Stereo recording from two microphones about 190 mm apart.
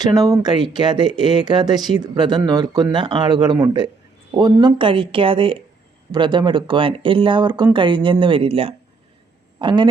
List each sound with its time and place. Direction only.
0.0 s speech: 20° right (ahead or behind)